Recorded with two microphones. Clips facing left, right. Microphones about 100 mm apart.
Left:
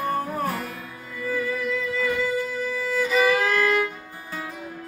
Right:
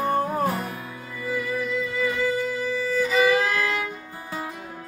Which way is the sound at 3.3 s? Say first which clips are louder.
Left 1 dB; 10° right (ahead or behind).